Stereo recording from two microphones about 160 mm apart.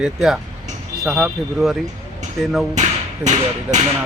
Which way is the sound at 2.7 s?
50° right (ahead or behind).